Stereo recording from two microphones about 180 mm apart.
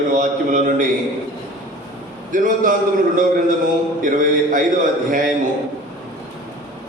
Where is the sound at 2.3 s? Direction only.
45° right (ahead or behind).